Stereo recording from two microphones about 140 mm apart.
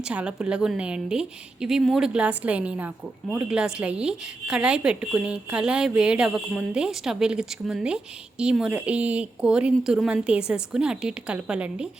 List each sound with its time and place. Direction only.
0.0 s a woman's voice: 10° right (ahead or behind)